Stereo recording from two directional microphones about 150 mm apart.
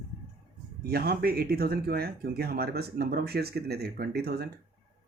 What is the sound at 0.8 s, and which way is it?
Speech, 90° right.